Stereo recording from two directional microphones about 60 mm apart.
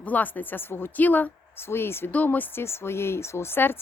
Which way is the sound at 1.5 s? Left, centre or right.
Left.